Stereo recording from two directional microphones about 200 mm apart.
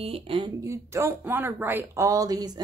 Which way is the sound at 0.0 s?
30° right (ahead or behind).